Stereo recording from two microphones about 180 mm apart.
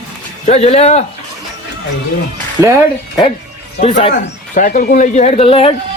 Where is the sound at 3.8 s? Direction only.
35° left (ahead or behind).